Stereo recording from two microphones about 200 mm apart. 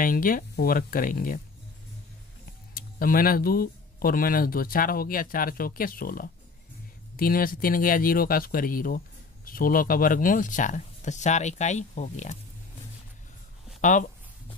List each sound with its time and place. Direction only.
0.0 s speech: 45° left (ahead or behind)
2.7 s speech: 45° left (ahead or behind)
13.7 s speech: 40° left (ahead or behind)